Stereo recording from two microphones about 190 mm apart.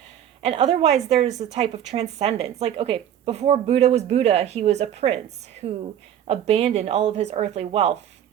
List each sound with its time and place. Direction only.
0.4 s a woman's voice: 30° right (ahead or behind)